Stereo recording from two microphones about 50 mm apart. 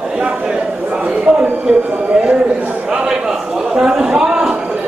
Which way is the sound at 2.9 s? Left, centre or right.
Centre.